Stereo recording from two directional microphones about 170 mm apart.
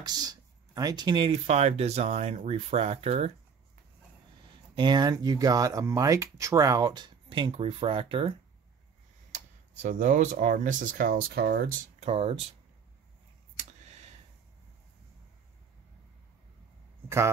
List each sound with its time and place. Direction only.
0.0 s speech: 25° right (ahead or behind); by 3.3 s 40° right (ahead or behind)
4.7 s speech: 25° right (ahead or behind)
9.3 s speech: 45° right (ahead or behind); by 11.6 s 65° right (ahead or behind)
12.0 s speech: 35° right (ahead or behind)
13.6 s a sound: 40° right (ahead or behind)